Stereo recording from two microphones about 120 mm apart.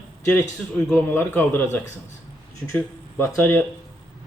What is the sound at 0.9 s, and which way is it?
A man's voice, 15° left (ahead or behind).